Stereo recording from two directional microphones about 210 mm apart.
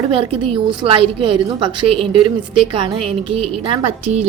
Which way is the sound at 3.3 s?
25° right (ahead or behind).